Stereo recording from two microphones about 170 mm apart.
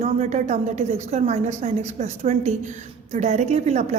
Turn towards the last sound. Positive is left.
turn(degrees=-40)  # may be behind; listen again after turning